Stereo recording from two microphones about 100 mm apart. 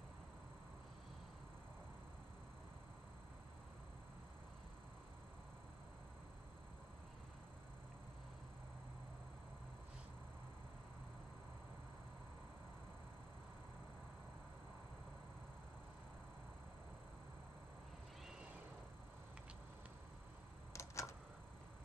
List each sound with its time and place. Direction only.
20.7 s typewriter: 30° left (ahead or behind)